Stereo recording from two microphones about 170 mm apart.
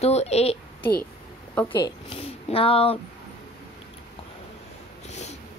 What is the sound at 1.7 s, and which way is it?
Speech, 30° left (ahead or behind).